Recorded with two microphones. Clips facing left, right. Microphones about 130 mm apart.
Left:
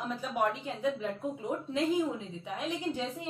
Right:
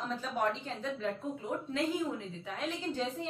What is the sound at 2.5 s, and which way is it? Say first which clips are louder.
Speech: left 3 dB; 15° left (ahead or behind).